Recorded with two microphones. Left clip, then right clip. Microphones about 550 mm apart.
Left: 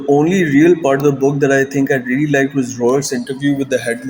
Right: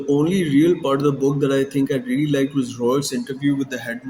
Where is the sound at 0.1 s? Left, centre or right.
Right.